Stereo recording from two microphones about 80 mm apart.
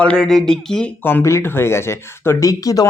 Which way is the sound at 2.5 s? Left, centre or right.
Left.